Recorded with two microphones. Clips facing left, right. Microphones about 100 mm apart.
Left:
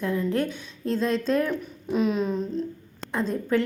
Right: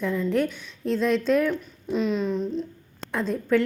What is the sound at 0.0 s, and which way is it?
Speech, 5° left (ahead or behind).